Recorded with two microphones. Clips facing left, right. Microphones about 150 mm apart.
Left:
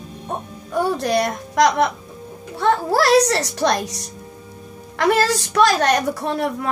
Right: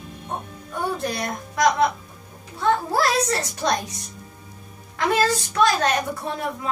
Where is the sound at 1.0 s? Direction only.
75° left (ahead or behind).